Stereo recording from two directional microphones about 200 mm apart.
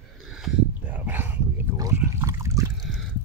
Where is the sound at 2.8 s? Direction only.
Centre (ahead or behind).